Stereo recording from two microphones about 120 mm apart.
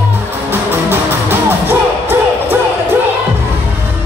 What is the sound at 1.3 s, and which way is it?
Music, 15° right (ahead or behind).